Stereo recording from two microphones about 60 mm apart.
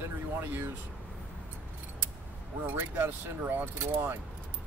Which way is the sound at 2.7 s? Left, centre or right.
Right.